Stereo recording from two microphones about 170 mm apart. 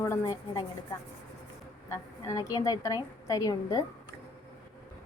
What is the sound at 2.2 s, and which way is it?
A woman's voice, 20° left (ahead or behind).